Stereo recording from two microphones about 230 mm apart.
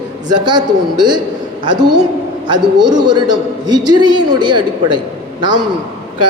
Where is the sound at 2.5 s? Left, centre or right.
Centre.